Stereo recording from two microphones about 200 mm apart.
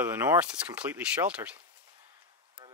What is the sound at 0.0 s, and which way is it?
Speech, 10° right (ahead or behind).